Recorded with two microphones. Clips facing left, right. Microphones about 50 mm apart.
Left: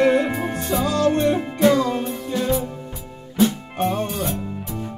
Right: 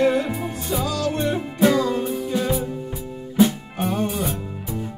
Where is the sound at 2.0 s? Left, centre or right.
Centre.